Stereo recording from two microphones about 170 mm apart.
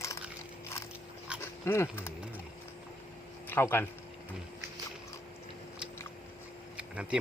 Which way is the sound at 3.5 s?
15° left (ahead or behind).